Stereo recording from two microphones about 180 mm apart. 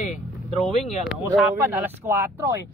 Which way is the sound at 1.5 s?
15° right (ahead or behind).